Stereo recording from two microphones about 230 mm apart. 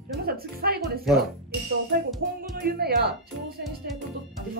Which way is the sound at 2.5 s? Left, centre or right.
Right.